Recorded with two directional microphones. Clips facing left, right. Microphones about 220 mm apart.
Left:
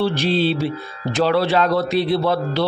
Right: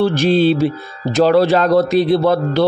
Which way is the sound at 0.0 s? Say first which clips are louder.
Right 6 dB; 50° right (ahead or behind).